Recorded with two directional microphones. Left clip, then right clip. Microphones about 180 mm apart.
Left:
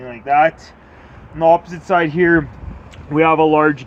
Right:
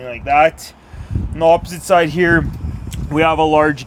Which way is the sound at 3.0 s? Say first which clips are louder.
Even; 20° right (ahead or behind).